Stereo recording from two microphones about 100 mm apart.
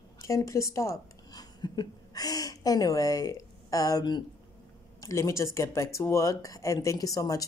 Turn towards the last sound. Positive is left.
turn(degrees=35)  # may be behind; listen again after turning